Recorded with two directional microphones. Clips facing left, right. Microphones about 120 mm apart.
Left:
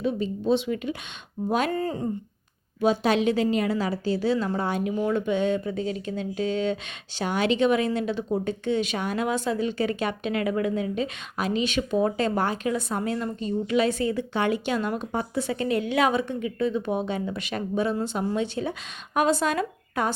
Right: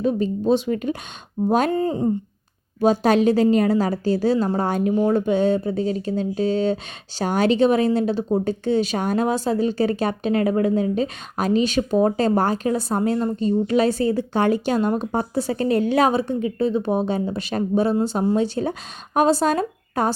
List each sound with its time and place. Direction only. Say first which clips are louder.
0.0 s speech: right 5 dB; 45° right (ahead or behind)
1.7 s speech: right 6 dB; 25° right (ahead or behind)
2.8 s speech: right 5 dB; 40° right (ahead or behind)